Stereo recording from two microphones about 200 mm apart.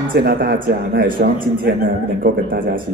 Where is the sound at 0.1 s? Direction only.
45° right (ahead or behind).